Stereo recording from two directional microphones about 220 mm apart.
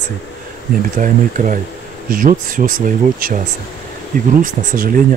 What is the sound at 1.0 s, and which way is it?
Speech, 35° right (ahead or behind).